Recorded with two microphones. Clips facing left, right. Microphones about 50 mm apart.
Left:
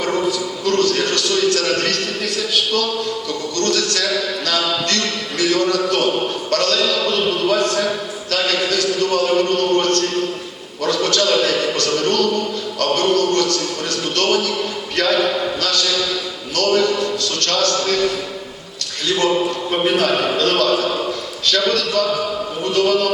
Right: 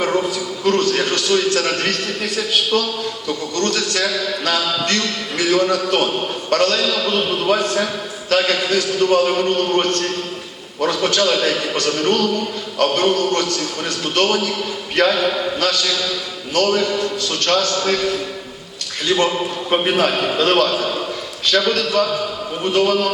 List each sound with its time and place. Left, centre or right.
0.3 s a man's voice: right
6.8 s a man's voice: centre
7.1 s a man's voice: centre
15.1 s a man's voice: centre
15.6 s a man's voice: centre